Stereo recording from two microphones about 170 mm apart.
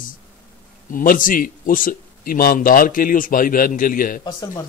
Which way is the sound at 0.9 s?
55° left (ahead or behind).